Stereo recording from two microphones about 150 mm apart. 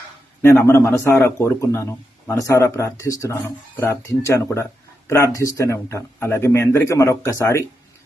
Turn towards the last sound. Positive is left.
turn(degrees=20)  # may be behind; listen again after turning